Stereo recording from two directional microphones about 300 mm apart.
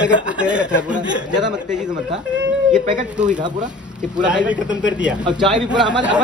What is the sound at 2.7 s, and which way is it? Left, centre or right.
Speech, right.